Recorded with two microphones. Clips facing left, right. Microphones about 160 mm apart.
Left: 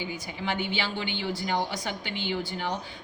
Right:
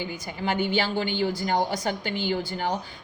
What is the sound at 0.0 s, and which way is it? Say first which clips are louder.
A woman's voice: right 3 dB; 45° right (ahead or behind).